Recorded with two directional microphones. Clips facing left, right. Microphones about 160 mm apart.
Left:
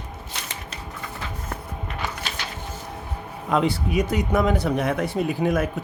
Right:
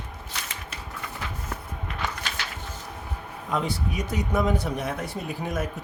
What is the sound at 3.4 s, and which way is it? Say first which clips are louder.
Speech: left 6 dB; 70° left (ahead or behind).